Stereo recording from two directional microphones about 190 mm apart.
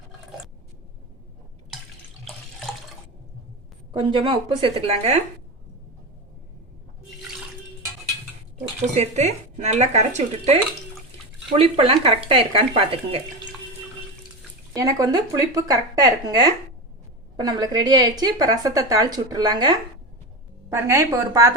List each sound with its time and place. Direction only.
2.2 s water: centre (ahead or behind)
3.9 s a woman's voice: 30° right (ahead or behind)
9.0 s a woman's voice: 35° right (ahead or behind)
14.7 s a woman's voice: 15° right (ahead or behind)